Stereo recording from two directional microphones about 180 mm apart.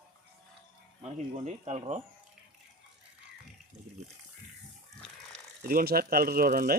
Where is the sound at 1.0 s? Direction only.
40° right (ahead or behind).